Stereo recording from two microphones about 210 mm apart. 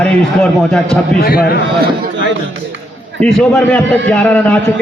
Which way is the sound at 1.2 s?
45° left (ahead or behind).